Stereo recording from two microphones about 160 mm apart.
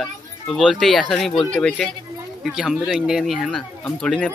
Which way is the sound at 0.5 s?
Centre (ahead or behind).